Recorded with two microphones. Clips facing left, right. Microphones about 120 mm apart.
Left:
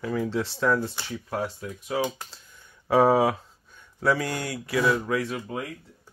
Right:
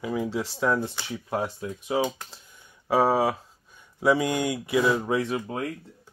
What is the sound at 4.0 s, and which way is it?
Speech, 15° right (ahead or behind).